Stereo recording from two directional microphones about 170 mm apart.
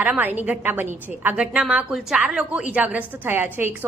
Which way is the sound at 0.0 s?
10° right (ahead or behind).